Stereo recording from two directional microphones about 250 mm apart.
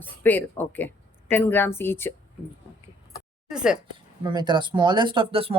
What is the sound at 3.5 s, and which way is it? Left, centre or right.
Speech, centre.